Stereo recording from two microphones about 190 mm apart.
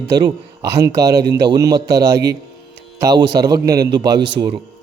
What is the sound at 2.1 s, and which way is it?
Speech, 60° right (ahead or behind).